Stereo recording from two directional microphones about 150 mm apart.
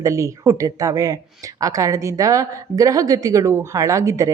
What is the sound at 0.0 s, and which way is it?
A woman's voice, 20° right (ahead or behind).